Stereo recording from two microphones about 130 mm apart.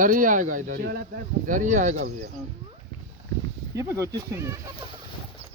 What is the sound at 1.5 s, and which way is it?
Speech, 75° right (ahead or behind).